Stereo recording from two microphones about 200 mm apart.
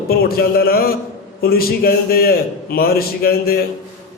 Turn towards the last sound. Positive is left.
turn(degrees=50)  # may be behind; listen again after turning